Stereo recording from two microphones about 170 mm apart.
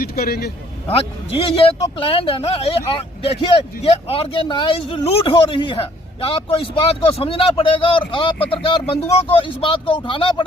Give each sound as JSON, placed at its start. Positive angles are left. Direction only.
{"t": 0.0, "sound": "a man's voice", "side_deg": 65}
{"t": 0.9, "sound": "speech", "side_deg": 35}